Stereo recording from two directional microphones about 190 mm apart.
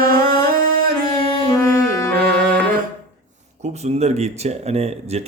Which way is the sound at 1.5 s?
20° left (ahead or behind).